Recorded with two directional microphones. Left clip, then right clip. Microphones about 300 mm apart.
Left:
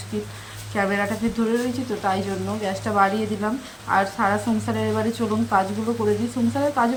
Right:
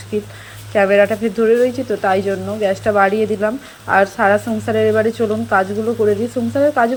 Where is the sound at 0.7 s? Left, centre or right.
Centre.